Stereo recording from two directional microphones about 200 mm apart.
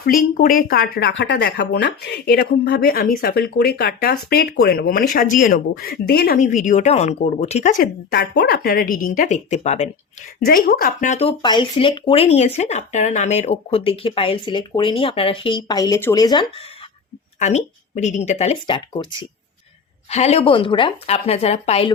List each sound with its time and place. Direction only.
0.0 s speech: 45° left (ahead or behind)
10.4 s speech: 50° left (ahead or behind); by 16.6 s 25° left (ahead or behind)
17.4 s speech: 35° left (ahead or behind)
20.1 s speech: 35° left (ahead or behind)